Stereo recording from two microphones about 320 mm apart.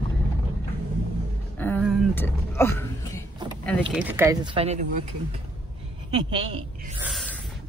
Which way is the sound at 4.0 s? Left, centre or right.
Centre.